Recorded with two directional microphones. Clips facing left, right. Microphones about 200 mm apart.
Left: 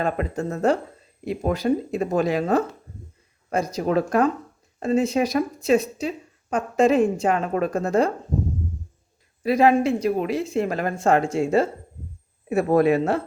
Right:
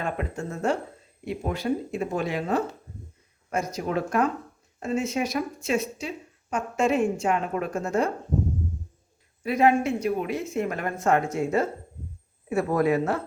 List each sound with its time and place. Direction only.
0.0 s speech: 35° left (ahead or behind)
9.4 s speech: 35° left (ahead or behind)